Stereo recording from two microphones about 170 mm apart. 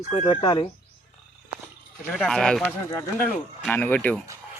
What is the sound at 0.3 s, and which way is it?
Speech, 30° left (ahead or behind).